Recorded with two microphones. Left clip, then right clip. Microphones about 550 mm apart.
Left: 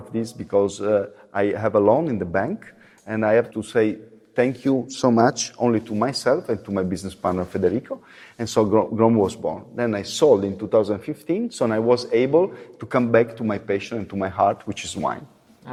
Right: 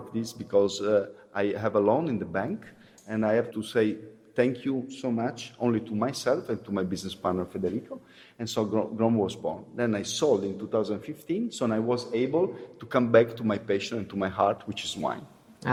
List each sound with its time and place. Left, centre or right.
0.1 s a man's voice: left
3.5 s a man's voice: left
7.9 s a man's voice: left
15.6 s a sound: right